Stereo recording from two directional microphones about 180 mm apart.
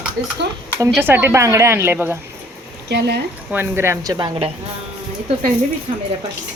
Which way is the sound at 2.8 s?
70° right (ahead or behind).